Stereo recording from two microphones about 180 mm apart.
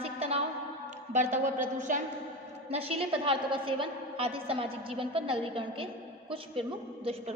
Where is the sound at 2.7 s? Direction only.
35° right (ahead or behind).